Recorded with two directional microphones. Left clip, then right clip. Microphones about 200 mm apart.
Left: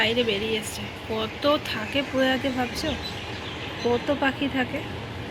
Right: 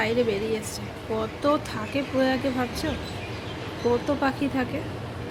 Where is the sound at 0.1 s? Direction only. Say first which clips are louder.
Even; 35° right (ahead or behind).